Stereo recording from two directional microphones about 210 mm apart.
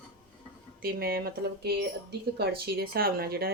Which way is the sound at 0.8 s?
45° right (ahead or behind).